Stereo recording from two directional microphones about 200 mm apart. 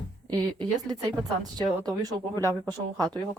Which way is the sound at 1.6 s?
20° right (ahead or behind).